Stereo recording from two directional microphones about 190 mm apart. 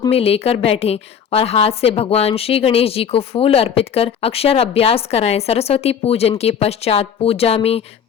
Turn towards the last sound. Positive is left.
turn(degrees=30)  # may be behind; listen again after turning